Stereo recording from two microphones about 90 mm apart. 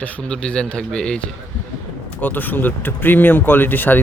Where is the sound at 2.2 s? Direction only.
20° left (ahead or behind).